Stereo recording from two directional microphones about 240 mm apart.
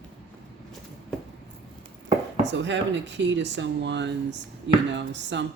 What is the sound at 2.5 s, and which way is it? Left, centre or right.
Speech, right.